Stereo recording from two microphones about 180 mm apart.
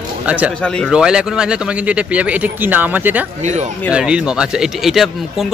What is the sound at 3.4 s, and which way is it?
Speech, 40° right (ahead or behind).